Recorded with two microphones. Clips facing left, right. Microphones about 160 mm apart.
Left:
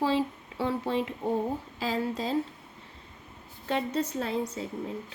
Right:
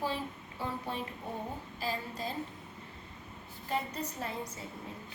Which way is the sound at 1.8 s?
90° left.